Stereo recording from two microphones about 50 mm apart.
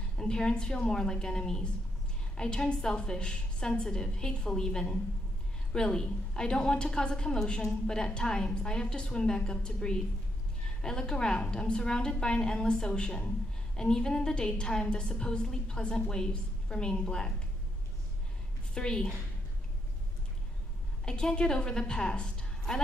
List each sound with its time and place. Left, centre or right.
0.2 s a woman's voice: centre
18.8 s a woman's voice: centre
21.0 s a woman's voice: centre